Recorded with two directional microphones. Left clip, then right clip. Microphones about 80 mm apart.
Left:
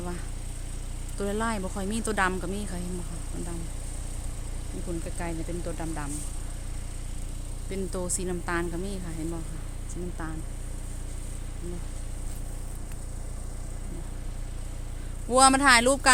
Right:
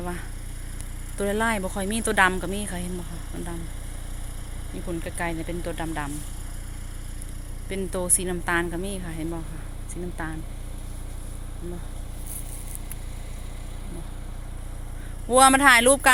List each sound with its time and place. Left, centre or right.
1.2 s a woman's voice: right
4.7 s a woman's voice: right
7.7 s a woman's voice: centre
15.4 s a woman's voice: right